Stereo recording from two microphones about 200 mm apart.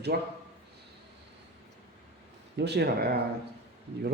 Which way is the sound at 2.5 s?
55° right (ahead or behind).